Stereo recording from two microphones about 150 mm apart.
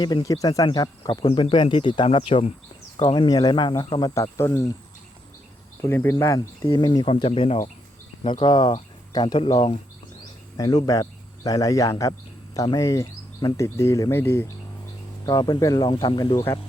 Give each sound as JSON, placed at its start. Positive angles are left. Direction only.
{"t": 0.0, "sound": "speech", "side_deg": 30}
{"t": 4.1, "sound": "speech", "side_deg": 20}
{"t": 5.8, "sound": "speech", "side_deg": 15}
{"t": 10.8, "sound": "speech", "side_deg": 25}
{"t": 15.3, "sound": "speech", "side_deg": 25}